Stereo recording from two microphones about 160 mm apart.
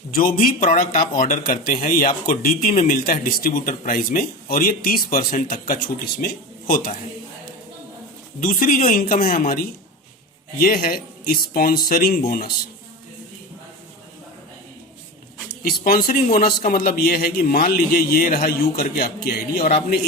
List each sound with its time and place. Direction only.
0.1 s speech: 60° left (ahead or behind)
8.4 s a man's voice: 60° left (ahead or behind)
15.6 s a man's voice: 65° left (ahead or behind)